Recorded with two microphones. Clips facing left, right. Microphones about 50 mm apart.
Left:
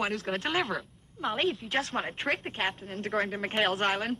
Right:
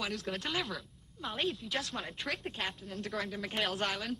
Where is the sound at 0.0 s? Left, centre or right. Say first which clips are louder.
Left 6 dB; left.